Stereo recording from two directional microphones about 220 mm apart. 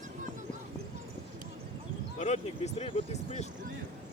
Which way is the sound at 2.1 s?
30° left (ahead or behind).